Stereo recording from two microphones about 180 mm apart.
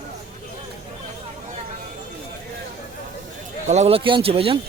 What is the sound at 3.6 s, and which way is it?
Speech, 40° right (ahead or behind).